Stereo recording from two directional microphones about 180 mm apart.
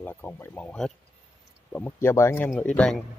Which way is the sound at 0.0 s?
10° left (ahead or behind).